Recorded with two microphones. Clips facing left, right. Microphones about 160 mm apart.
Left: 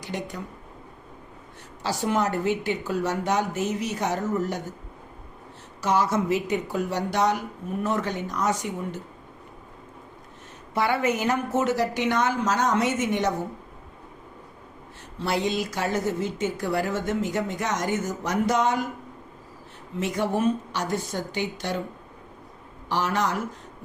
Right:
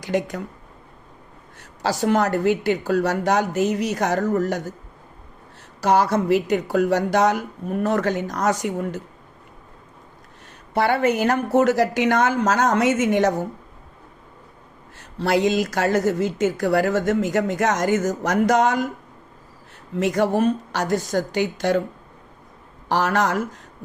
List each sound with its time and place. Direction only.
0.0 s a woman's voice: 90° right
2.0 s a woman's voice: 75° right (ahead or behind)
5.8 s a woman's voice: 70° right (ahead or behind)
6.7 s a woman's voice: 90° right
10.8 s a woman's voice: 60° right (ahead or behind)
11.5 s a woman's voice: 90° right
15.2 s a woman's voice: 90° right
20.0 s a woman's voice: 90° right
22.9 s a woman's voice: 90° right